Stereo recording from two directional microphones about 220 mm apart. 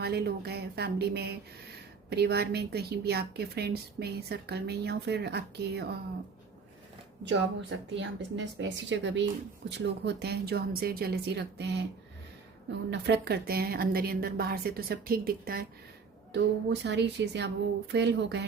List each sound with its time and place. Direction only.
0.0 s a woman's voice: 45° right (ahead or behind)
7.3 s a woman's voice: 55° right (ahead or behind)
12.9 s a woman's voice: 50° right (ahead or behind)
16.8 s a woman's voice: 50° right (ahead or behind)